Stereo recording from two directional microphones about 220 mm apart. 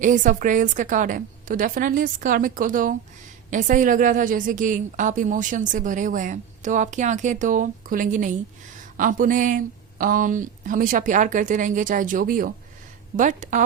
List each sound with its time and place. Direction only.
0.0 s a woman's voice: 35° right (ahead or behind)